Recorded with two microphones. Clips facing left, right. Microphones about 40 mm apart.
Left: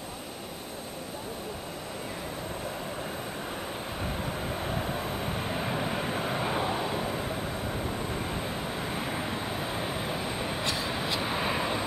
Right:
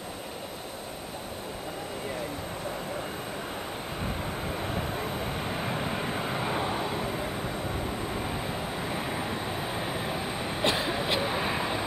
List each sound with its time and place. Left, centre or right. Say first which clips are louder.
4.2 s vehicle: even; centre
10.6 s train: right 8 dB; right
11.1 s vehicle: right 1 dB; centre